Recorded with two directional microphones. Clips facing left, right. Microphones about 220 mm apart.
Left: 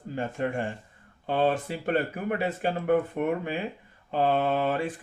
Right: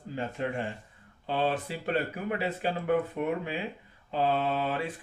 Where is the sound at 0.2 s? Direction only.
50° left (ahead or behind).